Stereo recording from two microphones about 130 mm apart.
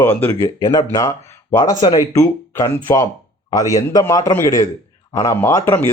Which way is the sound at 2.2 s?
20° left (ahead or behind).